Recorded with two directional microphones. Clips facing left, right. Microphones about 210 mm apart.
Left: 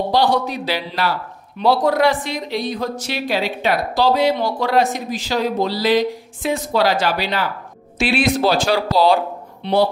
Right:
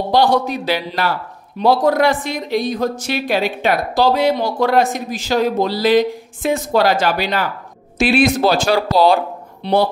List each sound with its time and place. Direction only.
0.1 s speech: 50° right (ahead or behind)